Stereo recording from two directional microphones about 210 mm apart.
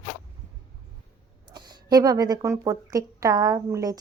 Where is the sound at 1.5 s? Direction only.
20° right (ahead or behind).